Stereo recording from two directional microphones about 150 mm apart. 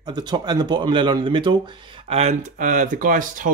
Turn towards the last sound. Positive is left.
turn(degrees=-60)  # may be behind; listen again after turning